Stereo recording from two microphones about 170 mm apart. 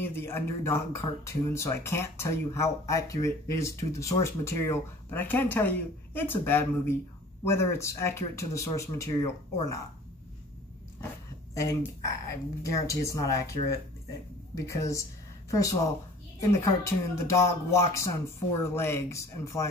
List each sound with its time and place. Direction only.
0.0 s speech: 15° left (ahead or behind)
11.5 s speech: 20° left (ahead or behind)
14.5 s speech: 20° left (ahead or behind)
16.3 s speech: 15° left (ahead or behind)